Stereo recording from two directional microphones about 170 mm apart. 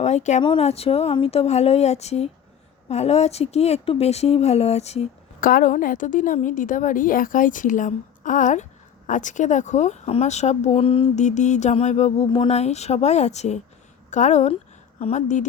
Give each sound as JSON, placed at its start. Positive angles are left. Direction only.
{"t": 0.0, "sound": "speech", "side_deg": 40}
{"t": 5.4, "sound": "a woman's voice", "side_deg": 55}